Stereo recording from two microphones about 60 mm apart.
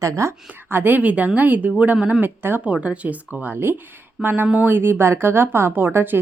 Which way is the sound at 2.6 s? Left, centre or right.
Right.